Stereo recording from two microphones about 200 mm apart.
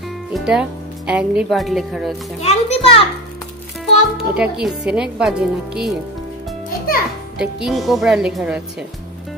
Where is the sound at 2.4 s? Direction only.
35° left (ahead or behind).